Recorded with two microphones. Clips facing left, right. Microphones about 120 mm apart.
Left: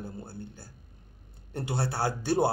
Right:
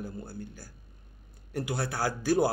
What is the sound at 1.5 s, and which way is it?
Speech, 25° left (ahead or behind).